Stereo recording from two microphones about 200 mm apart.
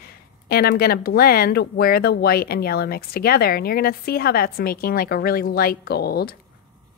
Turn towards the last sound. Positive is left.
turn(degrees=50)  # may be behind; listen again after turning